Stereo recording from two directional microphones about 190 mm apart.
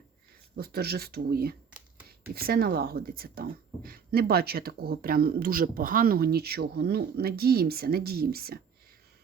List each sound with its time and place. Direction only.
0.5 s speech: 55° right (ahead or behind)